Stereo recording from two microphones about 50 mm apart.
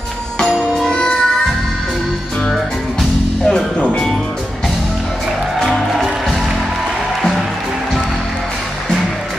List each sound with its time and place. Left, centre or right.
0.8 s music: centre
2.5 s music: centre
3.8 s music: left
5.7 s music: centre